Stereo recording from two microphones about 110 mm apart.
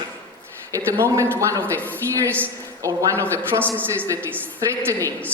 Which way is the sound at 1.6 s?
15° left (ahead or behind).